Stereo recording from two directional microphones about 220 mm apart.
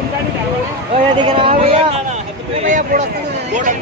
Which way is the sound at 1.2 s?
25° right (ahead or behind).